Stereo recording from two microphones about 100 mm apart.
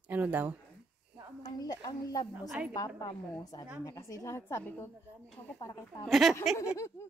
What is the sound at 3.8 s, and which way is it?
A woman's voice, 30° left (ahead or behind).